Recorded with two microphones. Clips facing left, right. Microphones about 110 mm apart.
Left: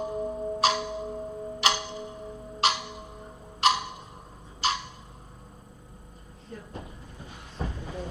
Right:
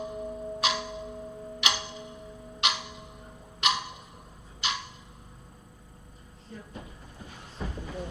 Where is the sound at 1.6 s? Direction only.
35° left (ahead or behind).